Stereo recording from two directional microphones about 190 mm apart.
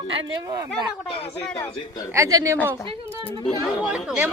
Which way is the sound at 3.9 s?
5° right (ahead or behind).